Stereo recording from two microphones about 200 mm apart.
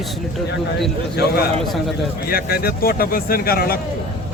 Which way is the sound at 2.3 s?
50° left (ahead or behind).